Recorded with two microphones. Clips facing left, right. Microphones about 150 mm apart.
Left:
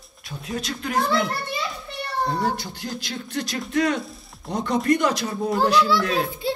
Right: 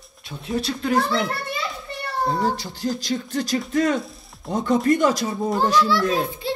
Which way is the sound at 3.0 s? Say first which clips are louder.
Right 5 dB; 45° right (ahead or behind).